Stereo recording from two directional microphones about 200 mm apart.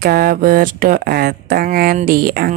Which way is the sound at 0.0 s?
50° right (ahead or behind).